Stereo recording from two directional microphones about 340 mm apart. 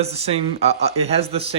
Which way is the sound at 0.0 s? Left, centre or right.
Centre.